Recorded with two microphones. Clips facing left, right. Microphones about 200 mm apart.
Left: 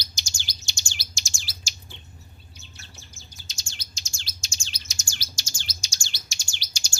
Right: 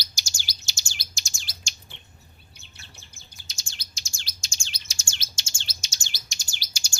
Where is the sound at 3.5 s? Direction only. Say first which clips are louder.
Left 2 dB; 35° right (ahead or behind).